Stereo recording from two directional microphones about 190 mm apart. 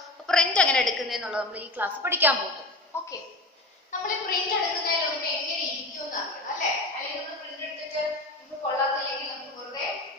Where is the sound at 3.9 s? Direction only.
40° left (ahead or behind).